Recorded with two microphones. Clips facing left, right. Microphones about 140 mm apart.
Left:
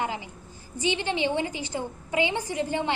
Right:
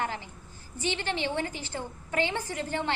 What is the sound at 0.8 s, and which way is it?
A woman's voice, 15° left (ahead or behind).